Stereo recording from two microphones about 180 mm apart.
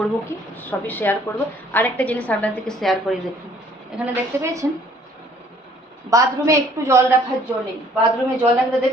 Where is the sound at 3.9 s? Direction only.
15° right (ahead or behind).